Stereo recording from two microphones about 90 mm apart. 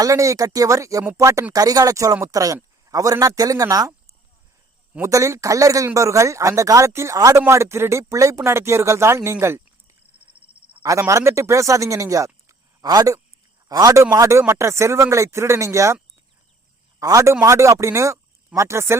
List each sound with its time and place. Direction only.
0.0 s speech: 35° right (ahead or behind)
5.0 s speech: 35° right (ahead or behind)
11.1 s speech: 30° right (ahead or behind)
17.0 s speech: 35° right (ahead or behind)